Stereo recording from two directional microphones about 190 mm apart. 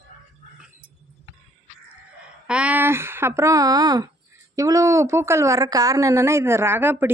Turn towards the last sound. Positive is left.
turn(degrees=-10)  # may be behind; listen again after turning